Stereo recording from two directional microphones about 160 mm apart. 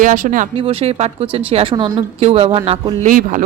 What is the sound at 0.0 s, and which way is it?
Speech, 55° right (ahead or behind).